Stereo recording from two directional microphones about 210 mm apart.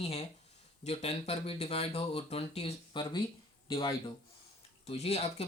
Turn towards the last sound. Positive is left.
turn(degrees=30)  # may be behind; listen again after turning